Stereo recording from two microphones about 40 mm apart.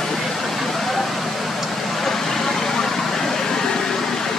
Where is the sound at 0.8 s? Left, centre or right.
Centre.